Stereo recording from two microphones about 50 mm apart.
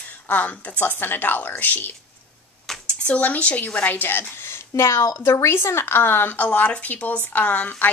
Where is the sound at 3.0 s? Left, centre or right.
Left.